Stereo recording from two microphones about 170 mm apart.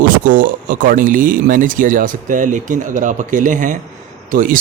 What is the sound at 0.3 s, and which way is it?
Speech, 50° right (ahead or behind).